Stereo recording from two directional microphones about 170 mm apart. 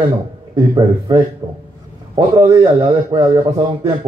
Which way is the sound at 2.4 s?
25° right (ahead or behind).